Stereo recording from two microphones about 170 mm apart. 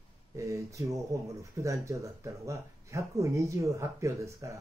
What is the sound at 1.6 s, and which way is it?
Speech, 20° right (ahead or behind).